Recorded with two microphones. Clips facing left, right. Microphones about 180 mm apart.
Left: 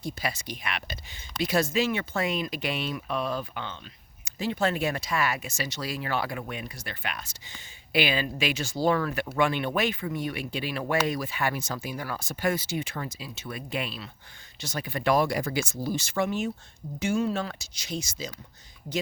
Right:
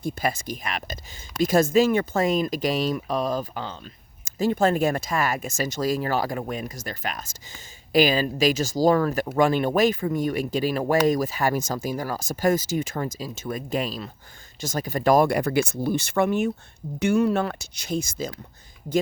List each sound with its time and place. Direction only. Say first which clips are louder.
0.0 s speech: right 6 dB; 50° right (ahead or behind)